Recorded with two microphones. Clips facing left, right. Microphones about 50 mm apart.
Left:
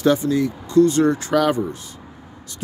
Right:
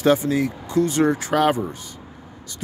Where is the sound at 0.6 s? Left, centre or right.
Centre.